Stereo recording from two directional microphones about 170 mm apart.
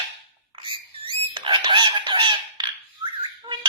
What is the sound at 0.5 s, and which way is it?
Bird, 30° right (ahead or behind).